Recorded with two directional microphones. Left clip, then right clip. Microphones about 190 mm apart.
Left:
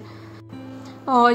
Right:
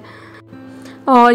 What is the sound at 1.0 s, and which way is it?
Speech, 45° right (ahead or behind).